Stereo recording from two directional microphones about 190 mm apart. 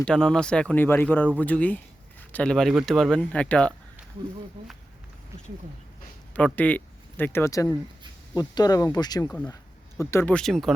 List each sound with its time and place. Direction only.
0.0 s speech: 5° left (ahead or behind)
6.3 s speech: 10° left (ahead or behind)